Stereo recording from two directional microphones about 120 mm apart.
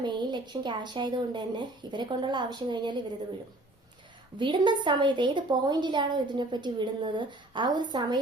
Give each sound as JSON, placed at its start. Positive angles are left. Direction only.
{"t": 0.0, "sound": "a woman's voice", "side_deg": -40}
{"t": 4.4, "sound": "a woman's voice", "side_deg": -40}